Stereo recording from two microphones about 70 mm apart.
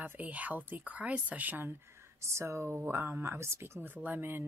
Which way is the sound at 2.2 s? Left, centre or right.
Right.